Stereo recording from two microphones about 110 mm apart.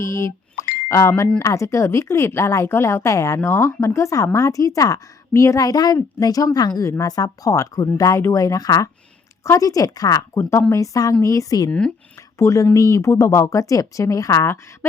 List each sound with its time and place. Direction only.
0.0 s a woman's voice: 25° left (ahead or behind)